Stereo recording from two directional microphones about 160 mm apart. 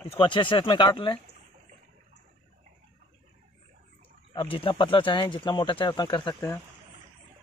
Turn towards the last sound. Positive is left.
turn(degrees=25)  # may be behind; listen again after turning